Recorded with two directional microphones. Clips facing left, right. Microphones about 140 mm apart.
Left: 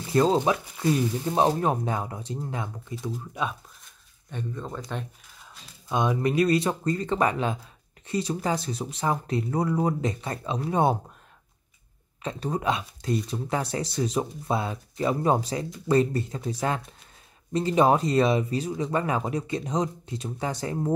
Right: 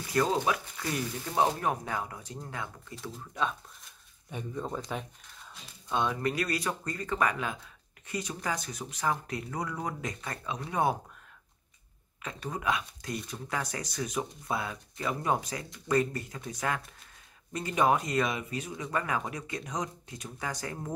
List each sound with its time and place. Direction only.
0.1 s speech: 25° left (ahead or behind)
3.0 s speech: 10° left (ahead or behind)
4.3 s speech: 5° right (ahead or behind)
5.9 s speech: 15° left (ahead or behind)
12.2 s speech: 30° left (ahead or behind)